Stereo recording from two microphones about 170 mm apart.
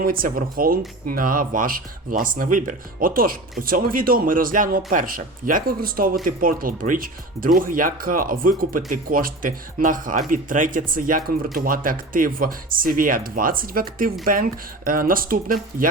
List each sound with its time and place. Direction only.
0.0 s speech: 55° right (ahead or behind)